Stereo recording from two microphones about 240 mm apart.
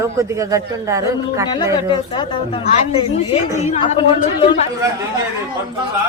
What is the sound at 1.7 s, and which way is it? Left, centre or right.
A woman's voice, centre.